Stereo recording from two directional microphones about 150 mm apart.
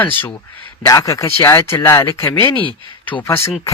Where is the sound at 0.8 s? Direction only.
25° left (ahead or behind).